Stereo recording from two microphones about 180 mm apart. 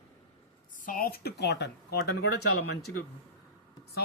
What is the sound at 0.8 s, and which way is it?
Speech, 50° left (ahead or behind).